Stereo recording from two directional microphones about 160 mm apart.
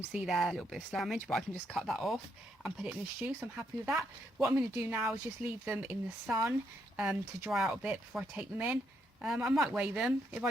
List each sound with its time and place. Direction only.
0.1 s speech: 5° right (ahead or behind)